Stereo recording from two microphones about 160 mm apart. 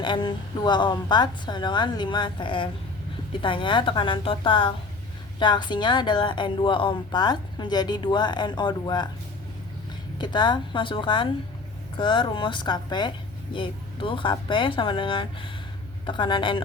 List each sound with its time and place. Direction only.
0.0 s a woman's voice: 30° left (ahead or behind)
10.2 s speech: 30° left (ahead or behind)